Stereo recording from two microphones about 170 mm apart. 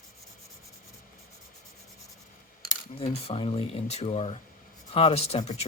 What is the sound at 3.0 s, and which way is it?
Speech, 35° left (ahead or behind).